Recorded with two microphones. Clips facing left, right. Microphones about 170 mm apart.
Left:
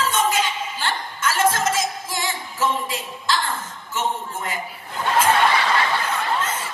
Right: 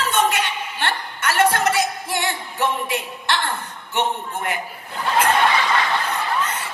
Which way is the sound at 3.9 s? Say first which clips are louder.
Right 2 dB; 65° right (ahead or behind).